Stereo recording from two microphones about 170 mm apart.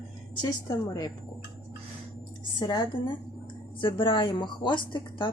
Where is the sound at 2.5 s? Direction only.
25° left (ahead or behind).